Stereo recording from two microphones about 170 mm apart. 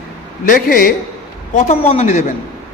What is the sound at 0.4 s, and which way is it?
Speech, 55° left (ahead or behind).